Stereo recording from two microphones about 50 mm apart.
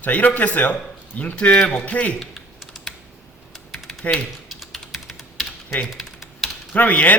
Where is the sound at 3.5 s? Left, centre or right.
Centre.